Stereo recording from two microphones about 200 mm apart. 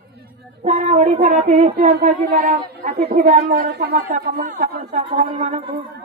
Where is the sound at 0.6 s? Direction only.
35° right (ahead or behind).